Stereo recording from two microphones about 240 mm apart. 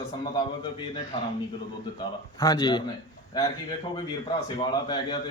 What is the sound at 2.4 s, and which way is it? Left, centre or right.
Speech, centre.